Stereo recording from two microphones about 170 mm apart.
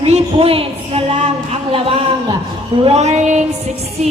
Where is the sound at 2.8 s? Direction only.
40° right (ahead or behind).